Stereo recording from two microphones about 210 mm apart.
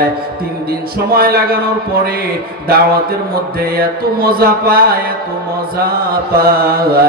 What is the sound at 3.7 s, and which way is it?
Mantra, 45° right (ahead or behind).